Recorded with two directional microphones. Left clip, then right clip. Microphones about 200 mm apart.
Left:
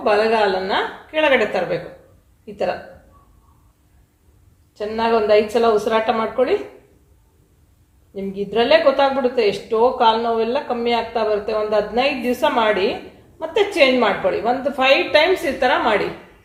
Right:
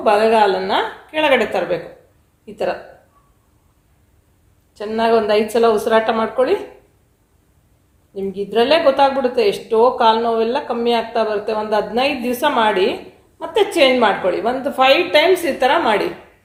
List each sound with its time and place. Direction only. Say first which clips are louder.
0.0 s a woman's voice: right 3 dB; 40° right (ahead or behind)
4.7 s a woman's voice: right 3 dB; 40° right (ahead or behind)
8.1 s a woman's voice: right 2 dB; 40° right (ahead or behind)